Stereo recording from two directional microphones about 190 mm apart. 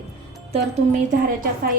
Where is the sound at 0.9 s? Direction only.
40° right (ahead or behind).